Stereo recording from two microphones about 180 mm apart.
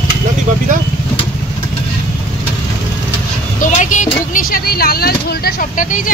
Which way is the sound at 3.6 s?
45° left (ahead or behind).